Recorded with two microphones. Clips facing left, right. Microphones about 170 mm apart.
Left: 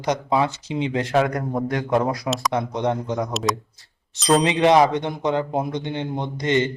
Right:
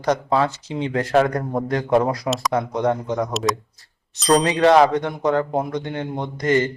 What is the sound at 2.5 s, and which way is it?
Speech, 20° left (ahead or behind).